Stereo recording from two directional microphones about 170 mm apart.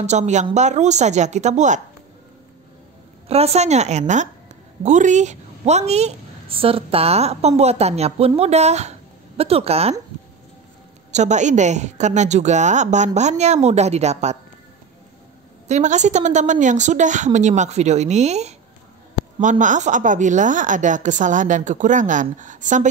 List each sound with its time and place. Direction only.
0.0 s a woman's voice: 45° right (ahead or behind)
3.3 s a woman's voice: 35° right (ahead or behind)
11.1 s a woman's voice: 45° right (ahead or behind)
15.7 s a woman's voice: 45° right (ahead or behind)
19.6 s a woman's voice: 45° right (ahead or behind)